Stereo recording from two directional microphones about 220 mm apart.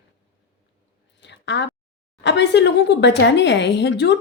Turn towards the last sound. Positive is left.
turn(degrees=50)  # may be behind; listen again after turning